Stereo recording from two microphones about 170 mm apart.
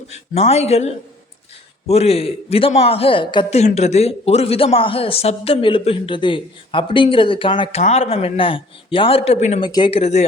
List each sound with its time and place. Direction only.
0.1 s a man's voice: 40° left (ahead or behind)
7.8 s a man's voice: 40° left (ahead or behind)
9.6 s a man's voice: 25° left (ahead or behind)